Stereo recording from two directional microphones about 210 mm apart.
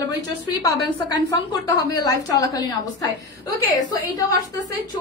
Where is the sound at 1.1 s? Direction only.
15° left (ahead or behind).